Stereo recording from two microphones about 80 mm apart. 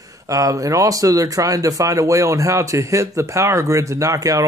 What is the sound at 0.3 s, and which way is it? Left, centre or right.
Speech, right.